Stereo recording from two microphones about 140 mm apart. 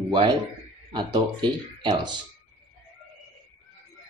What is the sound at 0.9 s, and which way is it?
Speech, 35° right (ahead or behind).